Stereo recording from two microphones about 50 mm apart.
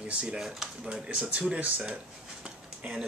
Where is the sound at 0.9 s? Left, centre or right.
Centre.